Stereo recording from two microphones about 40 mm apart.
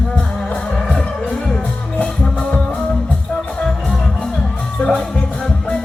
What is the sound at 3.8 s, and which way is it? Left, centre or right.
Music, centre.